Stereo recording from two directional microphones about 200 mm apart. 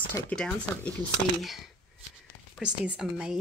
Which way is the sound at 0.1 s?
10° left (ahead or behind).